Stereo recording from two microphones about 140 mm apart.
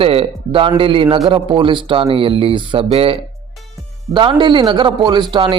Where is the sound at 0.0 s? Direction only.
40° right (ahead or behind).